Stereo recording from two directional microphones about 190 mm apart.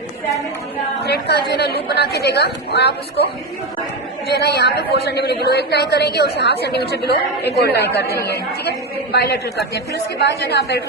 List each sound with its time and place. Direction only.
1.0 s a woman's voice: 60° left (ahead or behind)
4.3 s a woman's voice: 60° left (ahead or behind)